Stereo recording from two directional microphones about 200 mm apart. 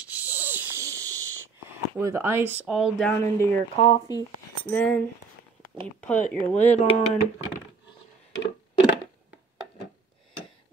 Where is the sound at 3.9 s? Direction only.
20° left (ahead or behind).